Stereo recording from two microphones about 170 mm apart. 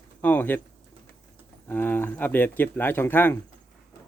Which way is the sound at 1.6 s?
10° left (ahead or behind).